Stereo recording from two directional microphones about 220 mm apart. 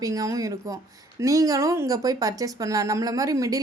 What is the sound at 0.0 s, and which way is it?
Speech, 15° right (ahead or behind).